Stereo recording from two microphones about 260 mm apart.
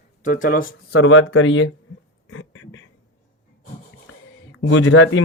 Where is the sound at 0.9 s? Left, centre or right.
Left.